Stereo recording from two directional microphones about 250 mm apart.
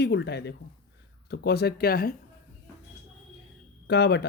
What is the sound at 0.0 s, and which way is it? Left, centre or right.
Speech, left.